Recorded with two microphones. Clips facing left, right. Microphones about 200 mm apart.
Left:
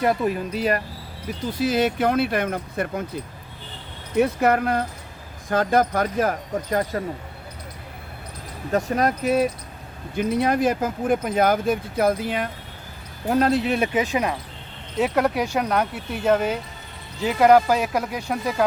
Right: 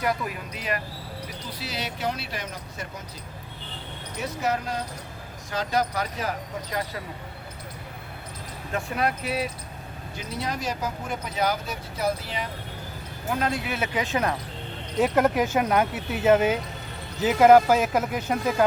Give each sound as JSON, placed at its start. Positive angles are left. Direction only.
{"t": 0.0, "sound": "speech", "side_deg": 30}
{"t": 1.5, "sound": "speech", "side_deg": 50}
{"t": 4.2, "sound": "speech", "side_deg": 60}
{"t": 8.7, "sound": "speech", "side_deg": 40}
{"t": 10.2, "sound": "speech", "side_deg": 55}
{"t": 13.2, "sound": "speech", "side_deg": 40}
{"t": 13.9, "sound": "speech", "side_deg": 15}
{"t": 14.9, "sound": "speech", "side_deg": 0}